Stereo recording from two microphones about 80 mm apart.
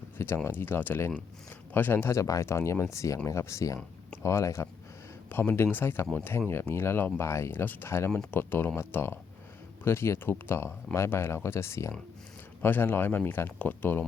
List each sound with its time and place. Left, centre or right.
0.4 s speech: left
2.2 s speech: left
2.5 s speech: left